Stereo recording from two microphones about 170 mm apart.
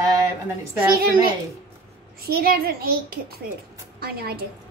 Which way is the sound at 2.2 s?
60° right (ahead or behind).